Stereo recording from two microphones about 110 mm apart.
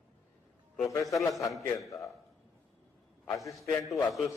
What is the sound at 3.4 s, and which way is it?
Speech, centre (ahead or behind).